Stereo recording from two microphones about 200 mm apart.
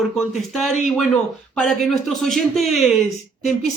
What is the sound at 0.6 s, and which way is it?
Speech, centre (ahead or behind).